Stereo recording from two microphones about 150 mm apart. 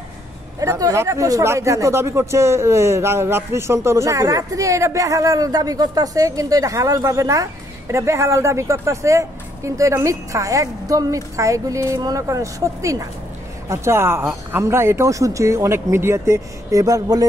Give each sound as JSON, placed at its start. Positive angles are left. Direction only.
{"t": 0.6, "sound": "speech", "side_deg": -20}